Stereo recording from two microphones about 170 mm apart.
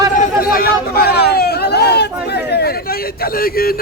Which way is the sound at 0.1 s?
60° left (ahead or behind).